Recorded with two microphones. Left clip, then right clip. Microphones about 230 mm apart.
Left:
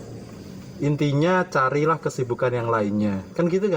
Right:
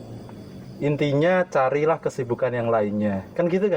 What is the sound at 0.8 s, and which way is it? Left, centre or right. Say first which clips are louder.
Speech: right 2 dB; centre.